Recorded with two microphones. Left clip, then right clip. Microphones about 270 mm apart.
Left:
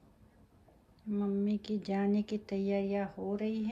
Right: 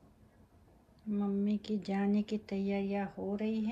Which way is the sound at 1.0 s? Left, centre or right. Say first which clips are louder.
Left 1 dB; centre.